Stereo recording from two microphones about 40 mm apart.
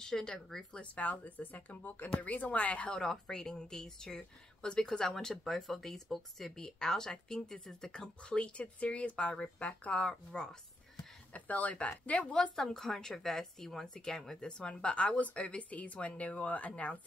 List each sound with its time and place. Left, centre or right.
0.0 s speech: centre
0.7 s a woman's voice: left
2.9 s speech: centre; by 10.1 s left
10.3 s speech: left
11.3 s a woman's voice: left
12.3 s speech: centre
14.6 s a woman's voice: left